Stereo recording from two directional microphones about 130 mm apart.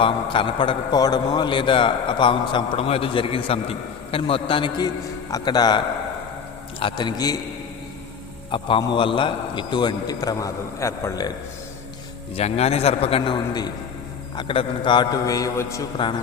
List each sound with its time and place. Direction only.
0.0 s a man's voice: 40° left (ahead or behind)
8.4 s a man's voice: 40° left (ahead or behind); by 11.3 s 25° left (ahead or behind)
12.4 s a man's voice: 55° left (ahead or behind); by 13.7 s 30° left (ahead or behind)
14.3 s a man's voice: 45° left (ahead or behind); by 15.9 s 25° left (ahead or behind)